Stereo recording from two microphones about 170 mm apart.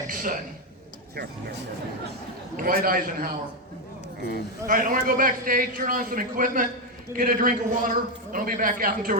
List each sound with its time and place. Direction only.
0.1 s a sound: 55° right (ahead or behind)
2.6 s a man's voice: 55° right (ahead or behind)
4.2 s speech: 75° left (ahead or behind)
4.6 s a man's voice: 55° right (ahead or behind)